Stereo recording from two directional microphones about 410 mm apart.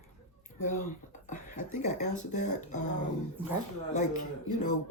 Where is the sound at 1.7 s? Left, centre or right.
Centre.